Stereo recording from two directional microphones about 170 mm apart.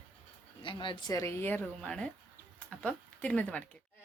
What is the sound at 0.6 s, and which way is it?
Speech, 30° left (ahead or behind).